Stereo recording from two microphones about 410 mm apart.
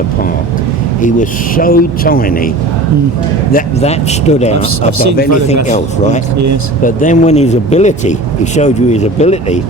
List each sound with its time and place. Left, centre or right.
1.0 s speech: centre
3.5 s speech: centre
4.9 s speech: right
5.6 s speech: centre
6.3 s speech: right
6.8 s speech: centre